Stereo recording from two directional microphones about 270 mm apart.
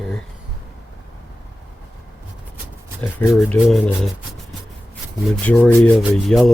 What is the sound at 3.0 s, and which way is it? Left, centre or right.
Speech, centre.